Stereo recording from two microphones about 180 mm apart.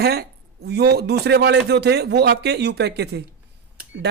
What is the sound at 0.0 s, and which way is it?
A man's voice, 60° right (ahead or behind).